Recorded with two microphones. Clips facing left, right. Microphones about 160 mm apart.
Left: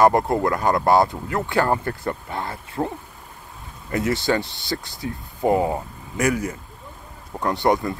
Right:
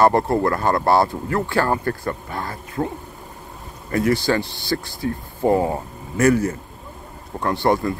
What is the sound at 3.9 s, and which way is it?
Speech, 20° left (ahead or behind).